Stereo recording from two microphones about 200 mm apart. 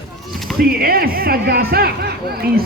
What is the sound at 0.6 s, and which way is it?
Speech, 50° right (ahead or behind).